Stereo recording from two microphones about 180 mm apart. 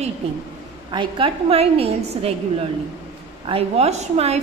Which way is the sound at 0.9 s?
30° right (ahead or behind).